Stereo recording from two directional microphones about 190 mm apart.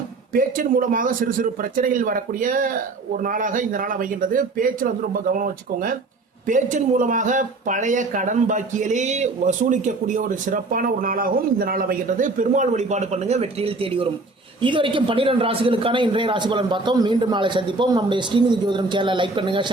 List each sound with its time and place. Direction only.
0.3 s a man's voice: 45° right (ahead or behind); by 19.7 s 25° right (ahead or behind)